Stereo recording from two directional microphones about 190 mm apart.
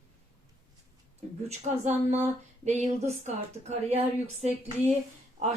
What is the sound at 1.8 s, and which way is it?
Speech, 35° right (ahead or behind).